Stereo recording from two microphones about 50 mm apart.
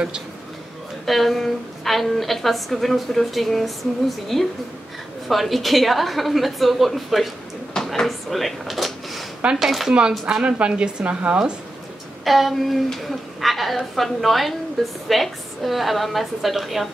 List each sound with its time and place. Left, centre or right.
1.0 s a woman's voice: centre
7.7 s drawer open or close: centre
9.6 s a woman's voice: centre
9.9 s a woman's voice: centre
12.3 s a woman's voice: centre